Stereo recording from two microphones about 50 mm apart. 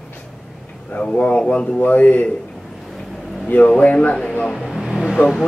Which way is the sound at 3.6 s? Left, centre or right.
Left.